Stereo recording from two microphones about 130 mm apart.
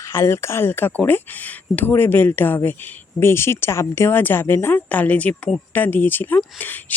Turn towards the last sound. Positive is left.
turn(degrees=15)  # may be behind; listen again after turning